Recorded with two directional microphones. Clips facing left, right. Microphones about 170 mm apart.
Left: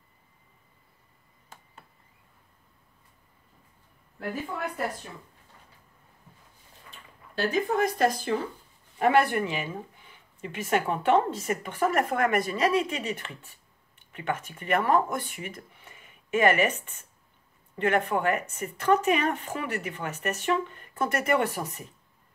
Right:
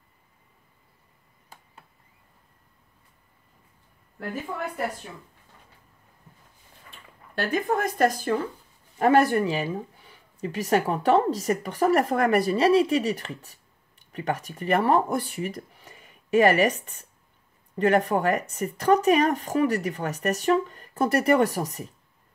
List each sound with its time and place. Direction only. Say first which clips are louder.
7.3 s speech: even; 50° right (ahead or behind)